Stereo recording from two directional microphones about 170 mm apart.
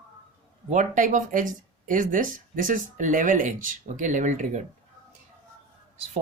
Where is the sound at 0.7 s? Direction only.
50° right (ahead or behind).